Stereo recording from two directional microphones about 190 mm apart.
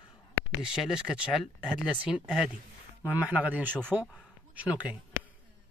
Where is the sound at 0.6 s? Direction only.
5° right (ahead or behind).